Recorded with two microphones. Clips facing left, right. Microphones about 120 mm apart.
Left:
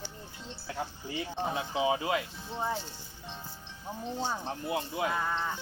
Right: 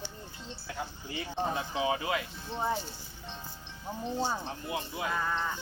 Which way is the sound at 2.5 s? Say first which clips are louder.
Right 1 dB; 10° left (ahead or behind).